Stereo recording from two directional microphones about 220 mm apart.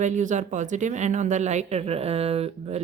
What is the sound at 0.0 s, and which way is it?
Speech, 35° right (ahead or behind).